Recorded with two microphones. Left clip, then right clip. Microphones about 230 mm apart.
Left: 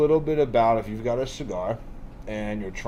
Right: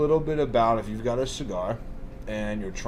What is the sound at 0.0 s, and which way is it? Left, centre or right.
Speech, left.